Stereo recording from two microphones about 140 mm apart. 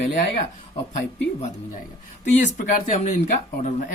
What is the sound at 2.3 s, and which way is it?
Speech, 60° left (ahead or behind).